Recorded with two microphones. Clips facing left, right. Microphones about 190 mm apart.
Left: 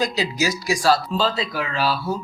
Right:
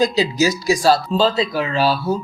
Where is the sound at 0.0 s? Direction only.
25° right (ahead or behind).